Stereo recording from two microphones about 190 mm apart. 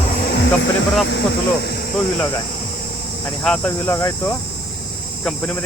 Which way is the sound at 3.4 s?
5° left (ahead or behind).